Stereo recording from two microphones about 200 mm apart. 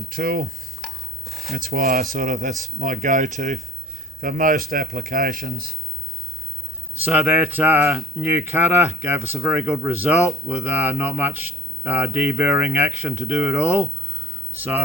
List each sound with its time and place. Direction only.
0.1 s speech: 50° right (ahead or behind)
0.9 s dishes: centre (ahead or behind)
1.5 s speech: 45° right (ahead or behind)
7.0 s speech: 10° right (ahead or behind)